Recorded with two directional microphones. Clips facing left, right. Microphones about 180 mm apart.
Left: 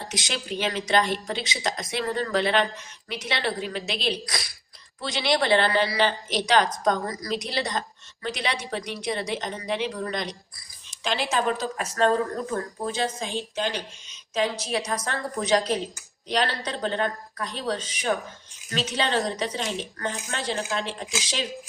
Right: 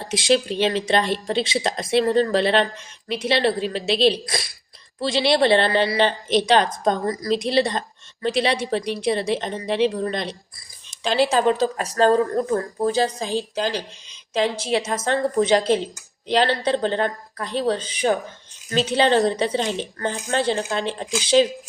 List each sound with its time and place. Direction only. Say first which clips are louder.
0.1 s a woman's voice: right 14 dB; 30° right (ahead or behind)